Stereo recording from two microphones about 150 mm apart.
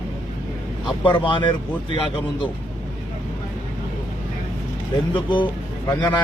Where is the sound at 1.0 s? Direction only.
35° left (ahead or behind).